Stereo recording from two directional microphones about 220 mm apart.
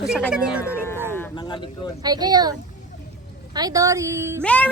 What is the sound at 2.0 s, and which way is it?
A woman's voice, 20° right (ahead or behind).